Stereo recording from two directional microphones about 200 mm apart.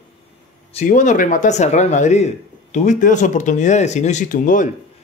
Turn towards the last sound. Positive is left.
turn(degrees=40)  # may be behind; listen again after turning